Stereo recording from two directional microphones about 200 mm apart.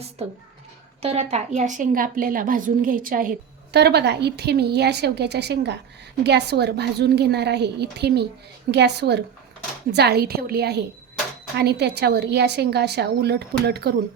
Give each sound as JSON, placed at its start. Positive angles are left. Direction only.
{"t": 1.0, "sound": "a woman's voice", "side_deg": -30}